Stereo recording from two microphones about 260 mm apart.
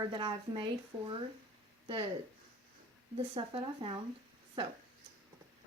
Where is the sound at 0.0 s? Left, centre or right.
Centre.